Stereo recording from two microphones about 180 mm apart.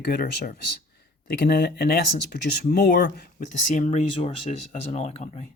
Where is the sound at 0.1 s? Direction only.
55° left (ahead or behind).